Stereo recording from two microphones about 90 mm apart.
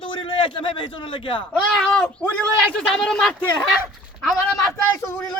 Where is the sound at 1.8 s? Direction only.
10° left (ahead or behind).